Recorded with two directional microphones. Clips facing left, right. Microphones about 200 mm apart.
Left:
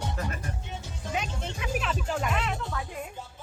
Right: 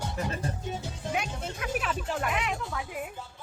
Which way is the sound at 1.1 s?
5° right (ahead or behind).